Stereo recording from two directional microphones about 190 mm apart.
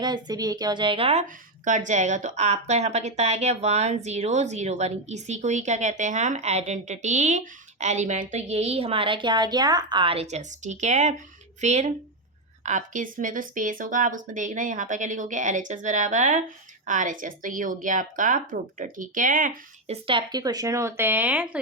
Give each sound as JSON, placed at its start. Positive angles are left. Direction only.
{"t": 0.0, "sound": "a woman's voice", "side_deg": -20}
{"t": 1.6, "sound": "a woman's voice", "side_deg": -40}
{"t": 20.1, "sound": "speech", "side_deg": -25}